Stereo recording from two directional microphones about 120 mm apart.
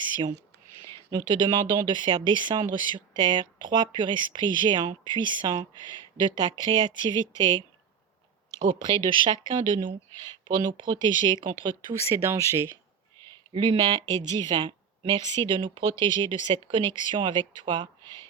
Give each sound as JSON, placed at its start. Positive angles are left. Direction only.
{"t": 1.1, "sound": "speech", "side_deg": -40}
{"t": 8.6, "sound": "speech", "side_deg": -40}
{"t": 12.1, "sound": "speech", "side_deg": -20}
{"t": 13.5, "sound": "speech", "side_deg": -50}